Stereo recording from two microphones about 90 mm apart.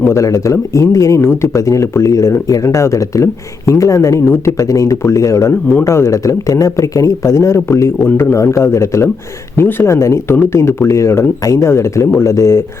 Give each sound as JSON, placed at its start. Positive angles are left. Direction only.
{"t": 0.1, "sound": "speech", "side_deg": 35}